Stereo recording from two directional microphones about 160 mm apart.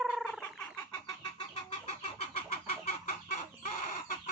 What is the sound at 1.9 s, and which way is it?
Chicken, 40° left (ahead or behind).